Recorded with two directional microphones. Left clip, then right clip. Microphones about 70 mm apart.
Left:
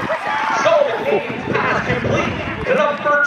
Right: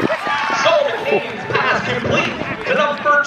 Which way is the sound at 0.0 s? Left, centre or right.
Right.